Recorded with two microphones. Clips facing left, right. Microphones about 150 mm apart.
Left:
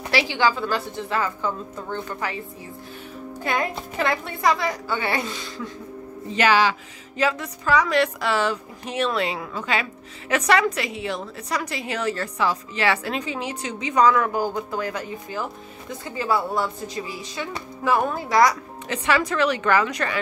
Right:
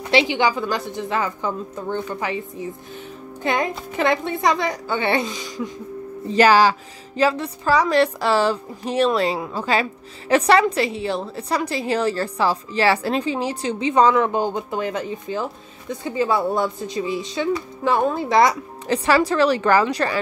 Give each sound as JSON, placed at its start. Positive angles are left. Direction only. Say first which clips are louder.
{"t": 0.1, "sound": "speech", "louder": "right 3 dB", "side_deg": -20}
{"t": 3.4, "sound": "speech", "louder": "right 3 dB", "side_deg": -20}
{"t": 6.3, "sound": "a woman's voice", "louder": "right 5 dB", "side_deg": -40}